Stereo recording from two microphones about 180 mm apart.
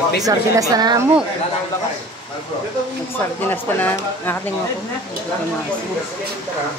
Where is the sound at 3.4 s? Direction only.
10° left (ahead or behind).